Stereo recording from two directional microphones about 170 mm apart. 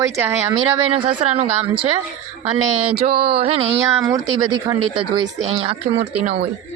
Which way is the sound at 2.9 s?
65° right (ahead or behind).